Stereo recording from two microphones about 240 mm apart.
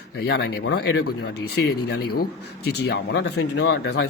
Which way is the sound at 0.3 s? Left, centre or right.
Left.